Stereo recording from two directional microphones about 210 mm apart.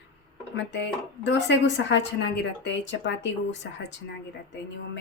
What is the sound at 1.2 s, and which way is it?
Speech, 60° left (ahead or behind).